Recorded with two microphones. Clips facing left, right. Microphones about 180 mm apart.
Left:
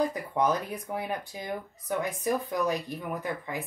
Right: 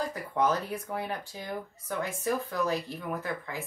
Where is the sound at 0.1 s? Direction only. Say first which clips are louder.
Left 1 dB; 15° left (ahead or behind).